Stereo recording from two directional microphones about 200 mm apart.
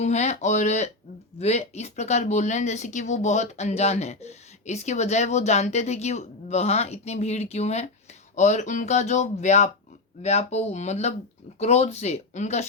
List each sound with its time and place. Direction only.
0.0 s speech: 35° left (ahead or behind)